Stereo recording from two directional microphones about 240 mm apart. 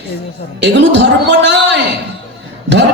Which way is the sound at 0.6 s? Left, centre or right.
Right.